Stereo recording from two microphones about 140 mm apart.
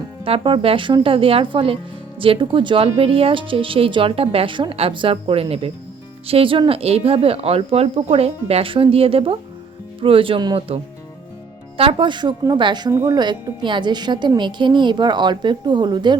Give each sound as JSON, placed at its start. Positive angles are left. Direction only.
{"t": 0.3, "sound": "speech", "side_deg": -40}
{"t": 11.8, "sound": "speech", "side_deg": -35}
{"t": 12.9, "sound": "a woman's voice", "side_deg": -20}
{"t": 13.1, "sound": "speech", "side_deg": -30}